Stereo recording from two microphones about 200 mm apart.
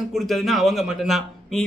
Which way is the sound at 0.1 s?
Centre (ahead or behind).